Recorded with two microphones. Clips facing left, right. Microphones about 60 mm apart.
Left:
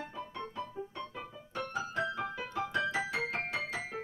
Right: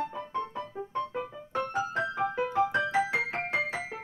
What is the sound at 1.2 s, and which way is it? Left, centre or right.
Music, right.